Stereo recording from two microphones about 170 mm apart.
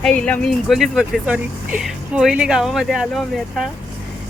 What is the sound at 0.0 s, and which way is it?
Speech, 5° left (ahead or behind).